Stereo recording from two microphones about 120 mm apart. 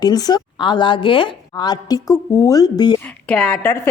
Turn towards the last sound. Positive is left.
turn(degrees=15)  # may be behind; listen again after turning